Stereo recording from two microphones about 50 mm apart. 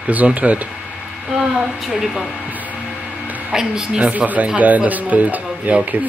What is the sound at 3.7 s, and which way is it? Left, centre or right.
Speech, centre.